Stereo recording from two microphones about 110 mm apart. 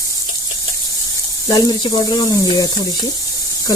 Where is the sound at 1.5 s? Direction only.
40° left (ahead or behind).